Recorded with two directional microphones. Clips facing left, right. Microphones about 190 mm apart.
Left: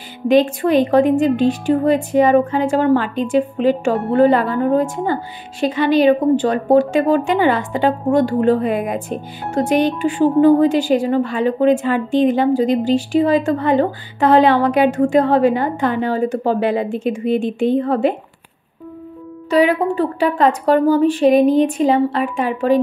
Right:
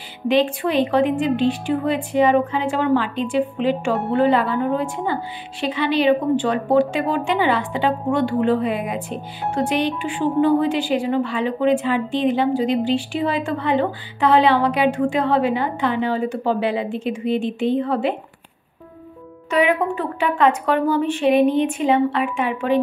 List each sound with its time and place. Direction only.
0.3 s a woman's voice: 45° left (ahead or behind)
19.5 s a woman's voice: 35° left (ahead or behind)